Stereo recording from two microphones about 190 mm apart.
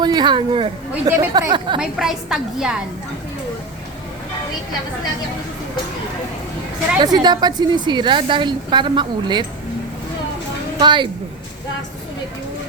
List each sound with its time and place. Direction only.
0.0 s a woman's voice: 25° right (ahead or behind)
1.1 s a woman's voice: 15° right (ahead or behind)
1.8 s a woman's voice: centre (ahead or behind)
7.0 s a woman's voice: 20° right (ahead or behind)
10.8 s a woman's voice: 25° right (ahead or behind)